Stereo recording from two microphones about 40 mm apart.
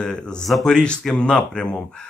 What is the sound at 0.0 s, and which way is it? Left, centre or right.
Speech, left.